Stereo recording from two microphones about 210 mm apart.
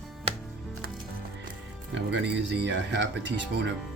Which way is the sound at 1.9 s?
60° right (ahead or behind).